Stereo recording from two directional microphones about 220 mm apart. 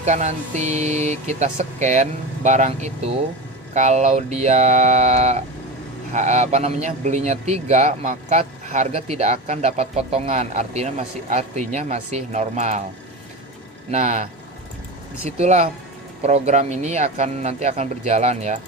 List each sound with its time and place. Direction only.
0.0 s speech: 30° right (ahead or behind)
13.9 s speech: 30° right (ahead or behind)
15.4 s speech: 30° right (ahead or behind)